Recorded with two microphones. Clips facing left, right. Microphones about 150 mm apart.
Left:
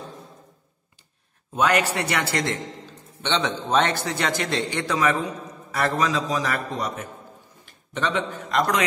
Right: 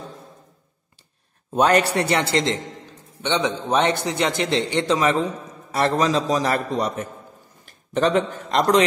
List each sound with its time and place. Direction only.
1.5 s a man's voice: 35° right (ahead or behind)